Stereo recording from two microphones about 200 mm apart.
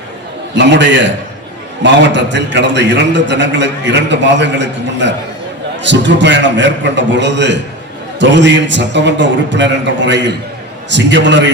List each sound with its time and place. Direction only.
0.5 s a man's voice: 60° right (ahead or behind)